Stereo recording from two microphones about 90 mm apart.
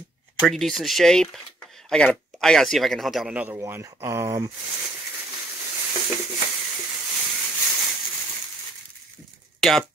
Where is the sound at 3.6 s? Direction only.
30° right (ahead or behind).